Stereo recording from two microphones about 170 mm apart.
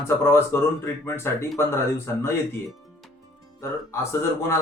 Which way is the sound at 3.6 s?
15° left (ahead or behind).